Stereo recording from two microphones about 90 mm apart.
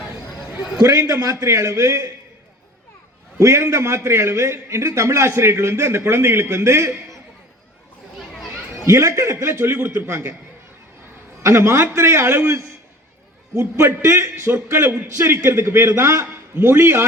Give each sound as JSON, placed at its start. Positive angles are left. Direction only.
{"t": 0.9, "sound": "a man's voice", "side_deg": -40}
{"t": 3.3, "sound": "a man's voice", "side_deg": -35}
{"t": 8.9, "sound": "a man's voice", "side_deg": -35}
{"t": 11.4, "sound": "a man's voice", "side_deg": -30}
{"t": 16.2, "sound": "a man's voice", "side_deg": -25}